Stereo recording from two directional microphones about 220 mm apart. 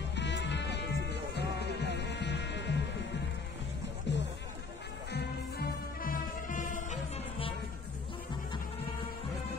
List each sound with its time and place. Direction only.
0.1 s music: 50° left (ahead or behind); by 7.5 s 30° left (ahead or behind)